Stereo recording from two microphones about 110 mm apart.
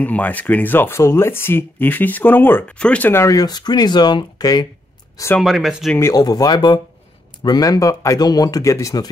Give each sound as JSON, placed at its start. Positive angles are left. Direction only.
{"t": 0.0, "sound": "speech", "side_deg": 15}
{"t": 3.1, "sound": "speech", "side_deg": 30}
{"t": 5.4, "sound": "speech", "side_deg": -5}
{"t": 5.9, "sound": "speech", "side_deg": 30}